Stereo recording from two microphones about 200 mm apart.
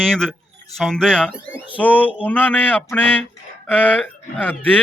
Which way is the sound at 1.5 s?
10° left (ahead or behind).